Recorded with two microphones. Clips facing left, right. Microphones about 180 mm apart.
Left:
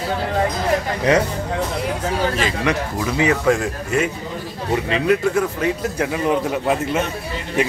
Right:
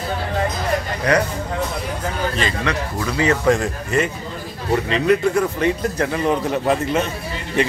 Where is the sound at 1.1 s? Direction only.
20° left (ahead or behind).